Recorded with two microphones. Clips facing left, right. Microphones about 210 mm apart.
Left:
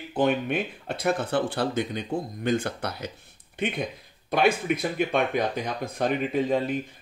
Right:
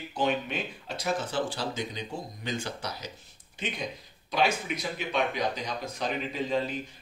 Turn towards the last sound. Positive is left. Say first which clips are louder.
# left 5 dB
turn(degrees=55)  # may be behind; listen again after turning